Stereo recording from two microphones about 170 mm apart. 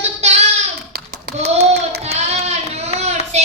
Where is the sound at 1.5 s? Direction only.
75° right (ahead or behind).